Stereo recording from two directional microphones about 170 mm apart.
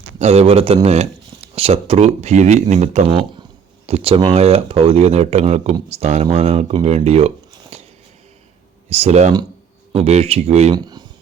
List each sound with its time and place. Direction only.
0.2 s speech: 40° right (ahead or behind)
8.9 s speech: 40° right (ahead or behind)
10.8 s speech: 25° right (ahead or behind)